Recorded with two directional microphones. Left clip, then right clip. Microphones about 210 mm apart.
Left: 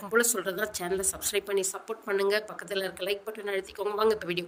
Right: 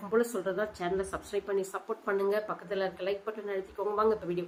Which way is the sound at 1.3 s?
55° left (ahead or behind).